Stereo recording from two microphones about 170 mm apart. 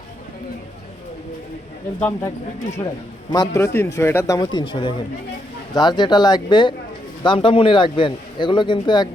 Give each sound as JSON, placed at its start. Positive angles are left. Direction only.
{"t": 2.0, "sound": "speech", "side_deg": 15}
{"t": 2.8, "sound": "a man's voice", "side_deg": 25}